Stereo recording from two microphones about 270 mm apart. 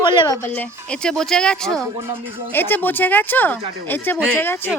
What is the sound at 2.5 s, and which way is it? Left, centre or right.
Speech, centre.